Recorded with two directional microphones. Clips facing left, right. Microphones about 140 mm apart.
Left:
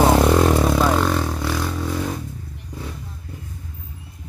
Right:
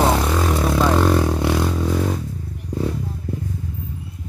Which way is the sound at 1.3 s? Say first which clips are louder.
Right 5 dB; 20° right (ahead or behind).